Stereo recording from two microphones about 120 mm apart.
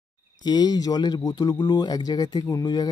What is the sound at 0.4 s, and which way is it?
Speech, 35° left (ahead or behind).